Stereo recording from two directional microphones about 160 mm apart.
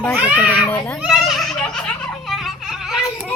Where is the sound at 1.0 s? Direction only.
Centre (ahead or behind).